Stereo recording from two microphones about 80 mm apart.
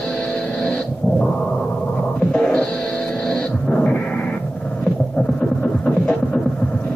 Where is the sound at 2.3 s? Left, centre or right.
Centre.